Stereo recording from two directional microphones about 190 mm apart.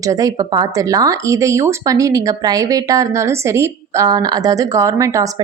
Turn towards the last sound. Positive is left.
turn(degrees=-15)  # may be behind; listen again after turning